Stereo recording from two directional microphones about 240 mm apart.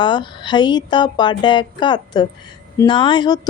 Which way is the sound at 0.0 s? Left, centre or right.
Centre.